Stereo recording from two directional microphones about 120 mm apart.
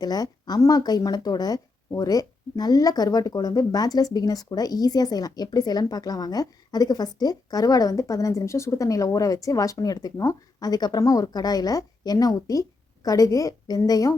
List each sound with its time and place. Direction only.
0.0 s speech: 35° left (ahead or behind)